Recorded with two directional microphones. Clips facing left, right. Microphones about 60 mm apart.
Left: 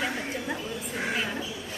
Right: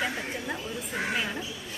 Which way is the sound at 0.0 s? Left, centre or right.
Centre.